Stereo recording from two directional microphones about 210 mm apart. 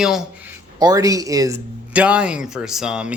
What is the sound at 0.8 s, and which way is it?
Speech, 15° right (ahead or behind).